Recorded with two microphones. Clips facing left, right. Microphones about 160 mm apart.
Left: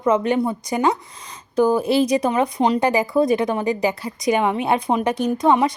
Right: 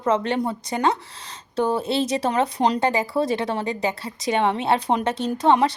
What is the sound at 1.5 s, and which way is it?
Speech, 25° right (ahead or behind).